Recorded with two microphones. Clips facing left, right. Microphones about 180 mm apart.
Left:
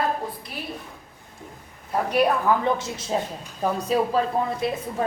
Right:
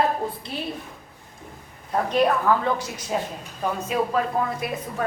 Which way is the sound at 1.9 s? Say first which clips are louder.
Even; 10° left (ahead or behind).